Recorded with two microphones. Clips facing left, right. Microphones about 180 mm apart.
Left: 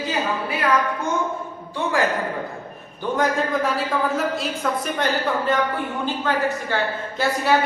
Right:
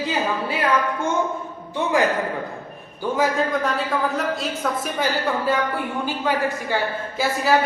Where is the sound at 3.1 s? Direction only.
Centre (ahead or behind).